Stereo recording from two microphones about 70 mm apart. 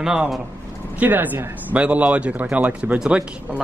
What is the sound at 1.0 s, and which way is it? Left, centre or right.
A man's voice, right.